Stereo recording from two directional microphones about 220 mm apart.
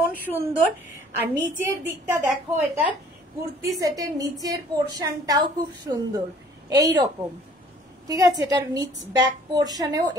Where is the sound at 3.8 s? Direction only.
15° right (ahead or behind).